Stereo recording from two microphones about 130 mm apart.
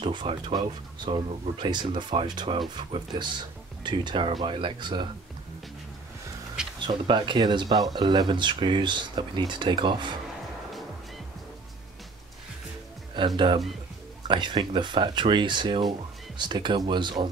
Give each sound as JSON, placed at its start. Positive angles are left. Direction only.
{"t": 0.0, "sound": "speech", "side_deg": -40}
{"t": 6.9, "sound": "speech", "side_deg": -35}
{"t": 13.2, "sound": "speech", "side_deg": -35}